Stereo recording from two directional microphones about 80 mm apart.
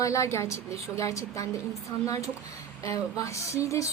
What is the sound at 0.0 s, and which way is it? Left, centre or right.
A woman's voice, left.